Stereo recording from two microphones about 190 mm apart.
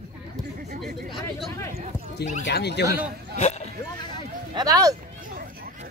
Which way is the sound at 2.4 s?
60° left (ahead or behind).